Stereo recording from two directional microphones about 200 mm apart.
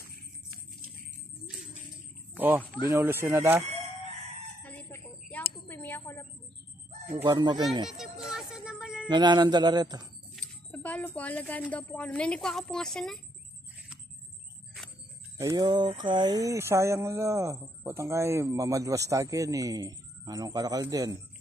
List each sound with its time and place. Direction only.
2.9 s speech: 15° right (ahead or behind)
4.6 s a sound: 10° left (ahead or behind)
7.1 s speech: 10° right (ahead or behind)
7.9 s music: centre (ahead or behind)
9.1 s speech: 20° right (ahead or behind)
10.3 s speech: 5° left (ahead or behind)
15.3 s speech: 20° right (ahead or behind)